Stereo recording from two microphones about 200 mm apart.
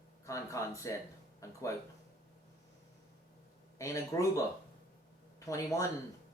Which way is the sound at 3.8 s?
15° left (ahead or behind).